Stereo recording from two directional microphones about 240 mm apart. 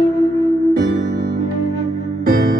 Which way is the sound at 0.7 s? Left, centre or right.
Right.